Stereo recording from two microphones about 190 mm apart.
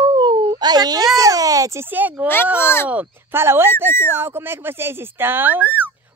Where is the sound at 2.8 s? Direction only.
10° right (ahead or behind).